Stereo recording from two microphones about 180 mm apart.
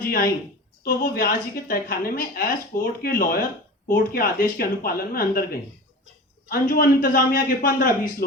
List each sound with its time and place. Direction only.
0.0 s a sound: 50° left (ahead or behind)
0.9 s a woman's voice: 50° left (ahead or behind)
6.5 s a woman's voice: 55° left (ahead or behind)